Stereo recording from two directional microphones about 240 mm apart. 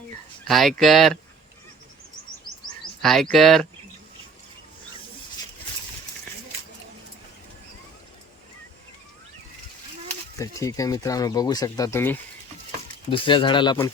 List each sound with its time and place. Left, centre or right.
0.4 s speech: centre
3.0 s speech: centre
10.3 s speech: centre
13.1 s speech: left